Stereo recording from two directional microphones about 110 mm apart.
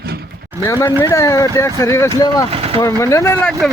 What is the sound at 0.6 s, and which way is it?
Speech, 25° left (ahead or behind).